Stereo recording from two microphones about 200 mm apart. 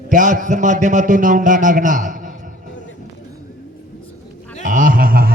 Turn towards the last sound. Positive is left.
turn(degrees=-45)  # may be behind; listen again after turning